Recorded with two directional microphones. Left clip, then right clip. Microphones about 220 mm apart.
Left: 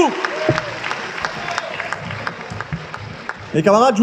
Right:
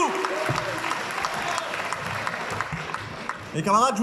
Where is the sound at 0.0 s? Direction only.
40° left (ahead or behind).